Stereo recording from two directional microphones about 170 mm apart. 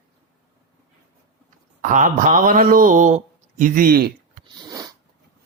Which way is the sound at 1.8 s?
50° right (ahead or behind).